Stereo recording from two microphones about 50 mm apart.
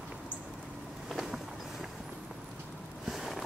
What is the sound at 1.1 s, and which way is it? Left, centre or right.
Vehicle, centre.